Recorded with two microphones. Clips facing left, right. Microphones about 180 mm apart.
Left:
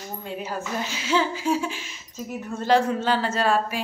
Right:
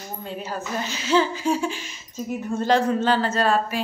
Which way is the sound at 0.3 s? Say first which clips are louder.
Even; 10° left (ahead or behind).